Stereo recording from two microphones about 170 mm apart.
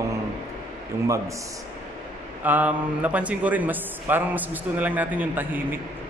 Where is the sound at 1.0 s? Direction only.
20° right (ahead or behind).